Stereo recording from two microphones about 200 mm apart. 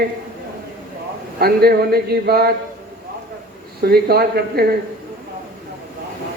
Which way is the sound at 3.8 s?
50° right (ahead or behind).